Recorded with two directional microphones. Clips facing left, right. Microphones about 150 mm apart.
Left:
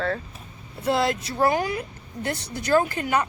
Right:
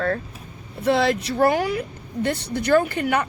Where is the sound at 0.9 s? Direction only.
70° right (ahead or behind).